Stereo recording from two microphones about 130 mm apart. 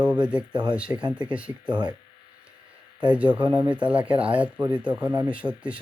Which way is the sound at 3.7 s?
10° right (ahead or behind).